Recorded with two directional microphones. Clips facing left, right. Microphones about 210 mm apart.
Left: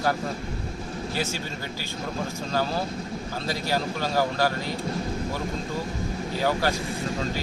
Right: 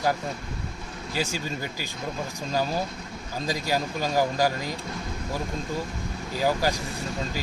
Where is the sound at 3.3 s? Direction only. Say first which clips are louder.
Right 1 dB; 15° right (ahead or behind).